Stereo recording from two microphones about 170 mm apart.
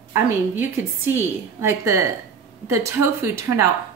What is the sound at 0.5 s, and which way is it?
Speech, 15° right (ahead or behind).